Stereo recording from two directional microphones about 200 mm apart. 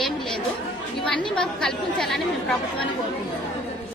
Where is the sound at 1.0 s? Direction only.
5° left (ahead or behind).